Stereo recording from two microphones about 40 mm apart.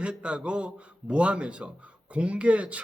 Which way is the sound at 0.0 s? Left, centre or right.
Right.